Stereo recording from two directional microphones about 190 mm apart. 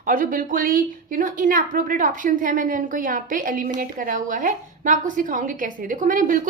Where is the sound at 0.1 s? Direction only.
45° right (ahead or behind).